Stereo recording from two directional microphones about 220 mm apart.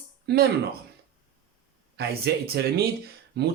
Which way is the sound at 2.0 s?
45° right (ahead or behind).